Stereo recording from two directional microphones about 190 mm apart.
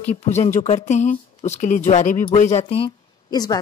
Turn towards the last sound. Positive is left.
turn(degrees=20)  # may be behind; listen again after turning